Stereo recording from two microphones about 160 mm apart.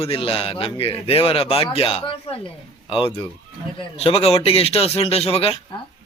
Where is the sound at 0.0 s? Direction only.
35° left (ahead or behind).